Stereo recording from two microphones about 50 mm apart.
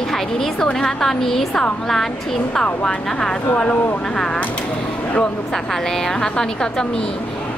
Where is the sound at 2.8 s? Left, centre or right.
Centre.